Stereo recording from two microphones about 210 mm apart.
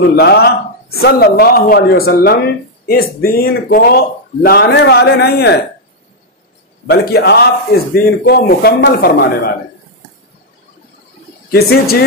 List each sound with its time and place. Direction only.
0.1 s speech: 50° left (ahead or behind)
6.9 s speech: 50° left (ahead or behind)
11.5 s speech: 50° left (ahead or behind)